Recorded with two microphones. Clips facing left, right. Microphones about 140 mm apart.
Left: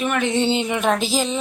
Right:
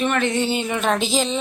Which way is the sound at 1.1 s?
5° left (ahead or behind).